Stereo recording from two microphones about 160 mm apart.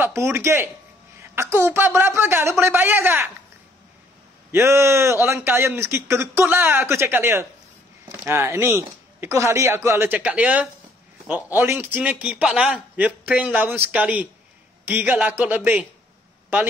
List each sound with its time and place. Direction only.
0.0 s a man's voice: 15° right (ahead or behind)
4.5 s a man's voice: 15° right (ahead or behind)